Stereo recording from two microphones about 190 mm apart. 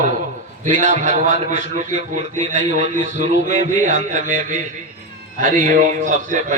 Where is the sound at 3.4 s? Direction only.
40° right (ahead or behind).